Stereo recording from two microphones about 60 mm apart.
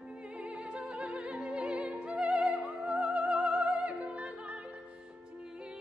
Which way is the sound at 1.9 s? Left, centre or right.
Centre.